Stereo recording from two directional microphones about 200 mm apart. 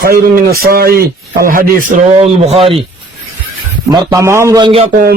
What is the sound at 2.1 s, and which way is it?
Speech, 30° right (ahead or behind).